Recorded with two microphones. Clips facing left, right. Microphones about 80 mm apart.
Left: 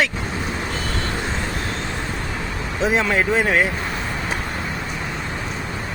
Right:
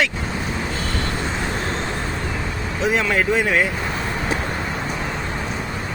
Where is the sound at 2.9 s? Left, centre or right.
Left.